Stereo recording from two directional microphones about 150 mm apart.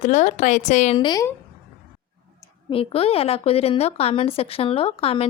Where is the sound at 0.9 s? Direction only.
30° left (ahead or behind).